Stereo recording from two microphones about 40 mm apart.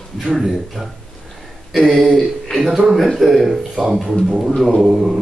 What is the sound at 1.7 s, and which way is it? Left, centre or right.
A man's voice, centre.